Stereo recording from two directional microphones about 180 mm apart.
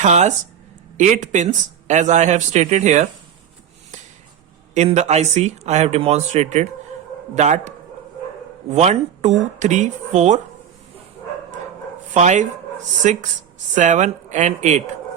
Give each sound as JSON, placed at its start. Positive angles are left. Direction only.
{"t": 0.0, "sound": "speech", "side_deg": -40}
{"t": 4.7, "sound": "speech", "side_deg": -40}
{"t": 8.7, "sound": "speech", "side_deg": -40}
{"t": 12.1, "sound": "speech", "side_deg": -40}